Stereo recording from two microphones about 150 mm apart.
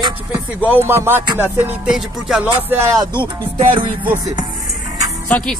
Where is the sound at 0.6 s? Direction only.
15° right (ahead or behind).